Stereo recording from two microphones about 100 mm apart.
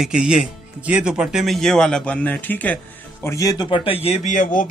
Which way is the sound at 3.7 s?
70° left (ahead or behind).